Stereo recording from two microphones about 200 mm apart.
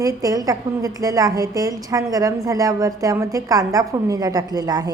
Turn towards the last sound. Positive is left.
turn(degrees=-20)  # may be behind; listen again after turning